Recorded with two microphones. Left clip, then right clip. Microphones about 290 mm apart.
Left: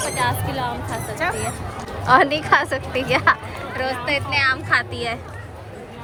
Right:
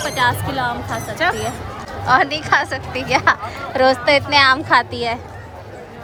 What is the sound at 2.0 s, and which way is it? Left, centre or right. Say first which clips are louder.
A woman's voice: even; centre.